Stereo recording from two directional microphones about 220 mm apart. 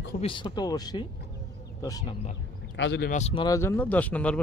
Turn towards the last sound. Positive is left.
turn(degrees=5)  # may be behind; listen again after turning